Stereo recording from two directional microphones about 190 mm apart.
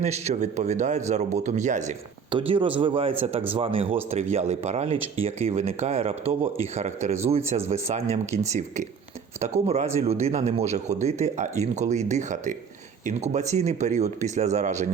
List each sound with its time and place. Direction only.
0.0 s speech: 35° right (ahead or behind)
2.3 s speech: 25° right (ahead or behind)